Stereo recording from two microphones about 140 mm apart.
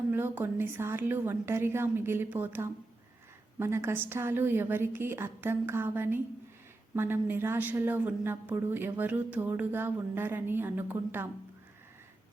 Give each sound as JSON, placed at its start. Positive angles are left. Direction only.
{"t": 0.1, "sound": "a woman's voice", "side_deg": -15}